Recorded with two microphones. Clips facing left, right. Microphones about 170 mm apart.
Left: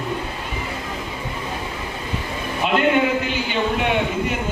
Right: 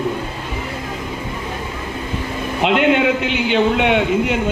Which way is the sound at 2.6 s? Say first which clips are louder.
Right 3 dB; 85° right.